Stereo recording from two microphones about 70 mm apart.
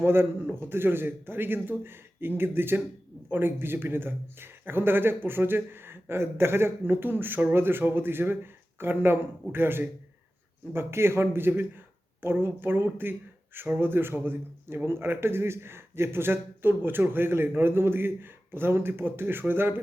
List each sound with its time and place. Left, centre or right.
0.0 s a man's voice: right